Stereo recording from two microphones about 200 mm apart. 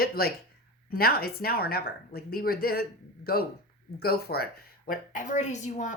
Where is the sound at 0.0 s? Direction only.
50° left (ahead or behind).